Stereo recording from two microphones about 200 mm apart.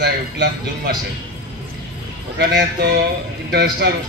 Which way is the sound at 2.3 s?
55° right (ahead or behind).